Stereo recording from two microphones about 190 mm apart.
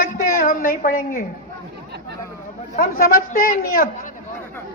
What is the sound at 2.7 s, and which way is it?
A woman's voice, 50° left (ahead or behind).